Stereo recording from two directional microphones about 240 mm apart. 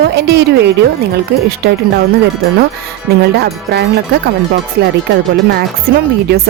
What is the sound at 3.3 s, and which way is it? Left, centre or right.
Speech, right.